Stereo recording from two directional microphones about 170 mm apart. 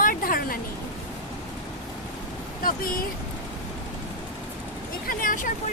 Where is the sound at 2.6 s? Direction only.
55° left (ahead or behind).